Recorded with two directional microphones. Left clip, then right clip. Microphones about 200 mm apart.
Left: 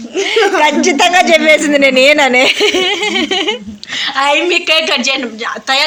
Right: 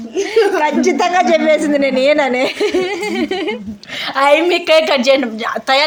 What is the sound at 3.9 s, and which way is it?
A woman's voice, 55° right (ahead or behind).